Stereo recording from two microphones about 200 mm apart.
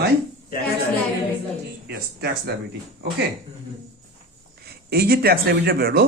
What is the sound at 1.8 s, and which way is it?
Speech, 55° right (ahead or behind).